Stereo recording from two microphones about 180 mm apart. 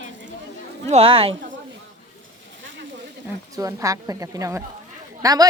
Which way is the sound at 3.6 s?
20° right (ahead or behind).